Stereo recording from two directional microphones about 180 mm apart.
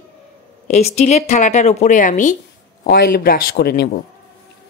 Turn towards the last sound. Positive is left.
turn(degrees=60)  # may be behind; listen again after turning